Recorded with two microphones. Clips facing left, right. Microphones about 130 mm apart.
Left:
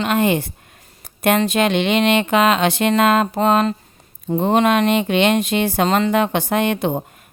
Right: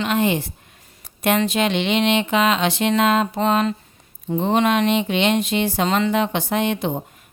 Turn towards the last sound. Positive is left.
turn(degrees=55)  # may be behind; listen again after turning